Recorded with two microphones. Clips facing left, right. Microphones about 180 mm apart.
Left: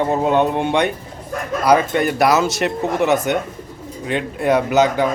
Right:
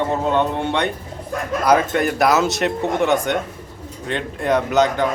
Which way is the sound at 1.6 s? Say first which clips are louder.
Left 2 dB; centre (ahead or behind).